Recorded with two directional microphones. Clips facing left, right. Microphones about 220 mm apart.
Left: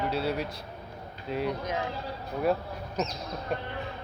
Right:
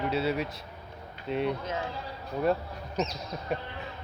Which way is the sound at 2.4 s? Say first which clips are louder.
Even; centre (ahead or behind).